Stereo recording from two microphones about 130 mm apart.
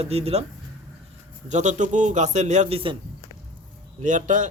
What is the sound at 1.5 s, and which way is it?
Speech, 65° right (ahead or behind).